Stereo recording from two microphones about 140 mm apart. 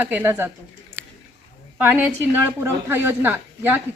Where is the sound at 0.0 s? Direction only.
15° right (ahead or behind).